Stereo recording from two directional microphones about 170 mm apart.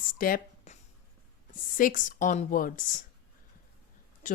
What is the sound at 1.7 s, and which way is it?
A woman's voice, 55° left (ahead or behind).